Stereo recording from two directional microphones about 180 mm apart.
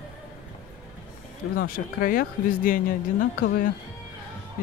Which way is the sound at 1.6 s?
50° left (ahead or behind).